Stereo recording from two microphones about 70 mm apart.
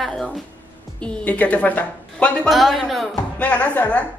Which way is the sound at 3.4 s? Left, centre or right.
Left.